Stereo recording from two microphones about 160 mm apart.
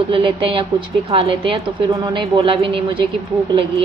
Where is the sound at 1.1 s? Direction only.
35° right (ahead or behind).